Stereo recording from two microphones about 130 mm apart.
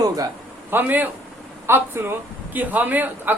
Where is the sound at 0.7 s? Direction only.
15° right (ahead or behind).